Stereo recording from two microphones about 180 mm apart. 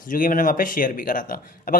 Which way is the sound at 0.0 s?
50° left (ahead or behind).